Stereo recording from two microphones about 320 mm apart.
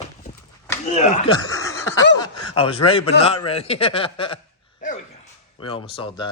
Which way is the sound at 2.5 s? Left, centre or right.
Centre.